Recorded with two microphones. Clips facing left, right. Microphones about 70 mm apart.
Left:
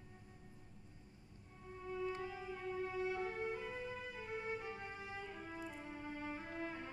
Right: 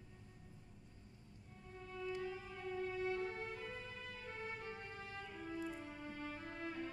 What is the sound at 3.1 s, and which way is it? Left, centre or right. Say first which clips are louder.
Music: left 1 dB; centre.